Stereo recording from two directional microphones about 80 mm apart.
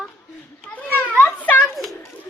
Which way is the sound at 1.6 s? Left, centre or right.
Centre.